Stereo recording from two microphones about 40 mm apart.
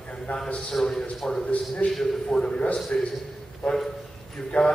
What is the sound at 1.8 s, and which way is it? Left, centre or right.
Speech, left.